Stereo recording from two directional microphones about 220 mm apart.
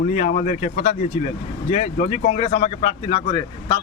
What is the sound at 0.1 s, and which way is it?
Speech, 35° left (ahead or behind).